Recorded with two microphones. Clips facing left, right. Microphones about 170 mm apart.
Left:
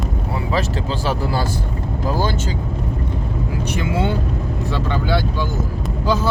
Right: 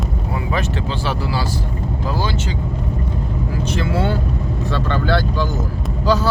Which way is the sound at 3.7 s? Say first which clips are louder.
Even; 15° left (ahead or behind).